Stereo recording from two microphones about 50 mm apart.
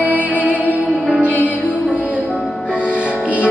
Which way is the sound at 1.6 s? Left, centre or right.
Right.